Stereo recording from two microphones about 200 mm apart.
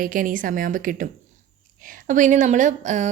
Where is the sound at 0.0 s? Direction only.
45° right (ahead or behind).